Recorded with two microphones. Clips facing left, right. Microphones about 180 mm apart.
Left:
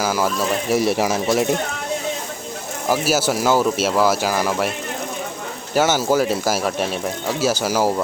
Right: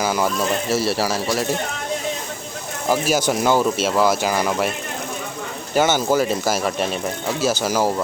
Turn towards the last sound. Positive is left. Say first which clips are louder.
# left 1 dB
turn(degrees=10)  # may be behind; listen again after turning